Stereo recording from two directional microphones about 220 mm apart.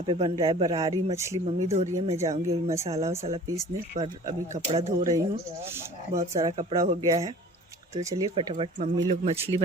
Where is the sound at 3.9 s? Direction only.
25° right (ahead or behind).